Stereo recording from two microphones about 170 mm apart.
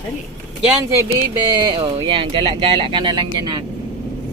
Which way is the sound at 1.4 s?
25° right (ahead or behind).